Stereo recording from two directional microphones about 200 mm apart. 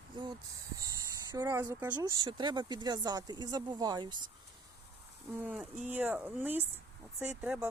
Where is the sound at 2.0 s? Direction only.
20° right (ahead or behind).